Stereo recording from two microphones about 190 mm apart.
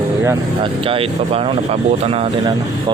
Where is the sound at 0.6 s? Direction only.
30° right (ahead or behind).